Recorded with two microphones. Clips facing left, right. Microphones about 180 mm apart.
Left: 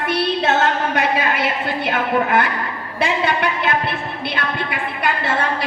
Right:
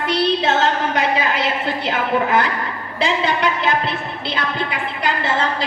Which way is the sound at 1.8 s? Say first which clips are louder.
Left 1 dB; 60° left (ahead or behind).